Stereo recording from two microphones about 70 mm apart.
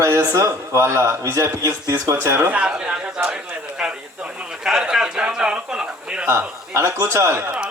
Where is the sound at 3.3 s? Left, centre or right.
Centre.